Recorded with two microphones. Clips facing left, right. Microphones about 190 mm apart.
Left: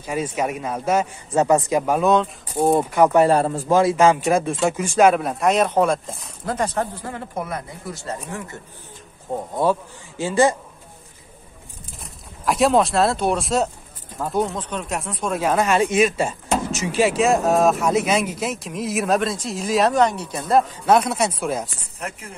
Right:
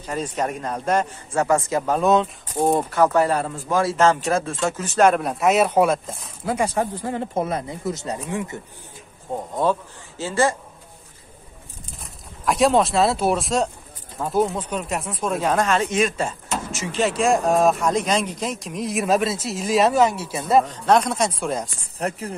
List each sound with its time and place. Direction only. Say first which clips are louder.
0.0 s speech: left 2 dB; 10° left (ahead or behind)
1.3 s speech: left 3 dB; 20° left (ahead or behind)
2.0 s speech: even; centre (ahead or behind); by 3.3 s 15° left (ahead or behind)
3.3 s a man's voice: left 6 dB; 35° left (ahead or behind)
3.8 s speech: even; 10° left (ahead or behind); by 8.5 s 15° right (ahead or behind)
9.6 s speech: left 1 dB; 10° left (ahead or behind)
12.4 s speech: even; centre (ahead or behind)
22.0 s speech: right 6 dB; 35° right (ahead or behind)